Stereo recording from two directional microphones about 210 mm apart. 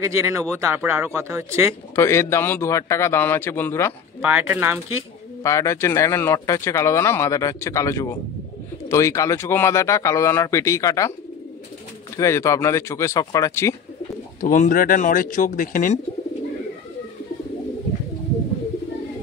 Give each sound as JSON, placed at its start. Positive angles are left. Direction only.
{"t": 0.0, "sound": "speech", "side_deg": -15}
{"t": 2.0, "sound": "speech", "side_deg": 15}
{"t": 4.2, "sound": "speech", "side_deg": -10}
{"t": 5.4, "sound": "speech", "side_deg": 15}
{"t": 12.2, "sound": "speech", "side_deg": 15}
{"t": 14.4, "sound": "speech", "side_deg": 40}